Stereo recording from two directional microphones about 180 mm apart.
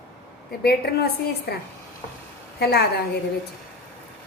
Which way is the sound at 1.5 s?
65° left (ahead or behind).